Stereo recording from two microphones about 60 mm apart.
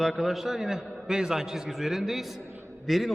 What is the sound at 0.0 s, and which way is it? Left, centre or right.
A man's voice, centre.